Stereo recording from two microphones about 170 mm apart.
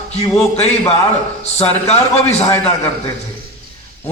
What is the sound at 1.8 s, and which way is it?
Speech, 40° left (ahead or behind).